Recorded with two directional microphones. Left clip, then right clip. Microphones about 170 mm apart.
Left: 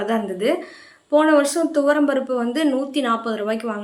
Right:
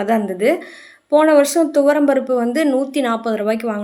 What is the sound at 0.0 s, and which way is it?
Speech, 30° right (ahead or behind).